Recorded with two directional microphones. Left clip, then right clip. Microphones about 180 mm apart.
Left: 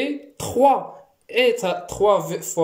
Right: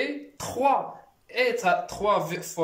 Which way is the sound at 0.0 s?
50° left (ahead or behind).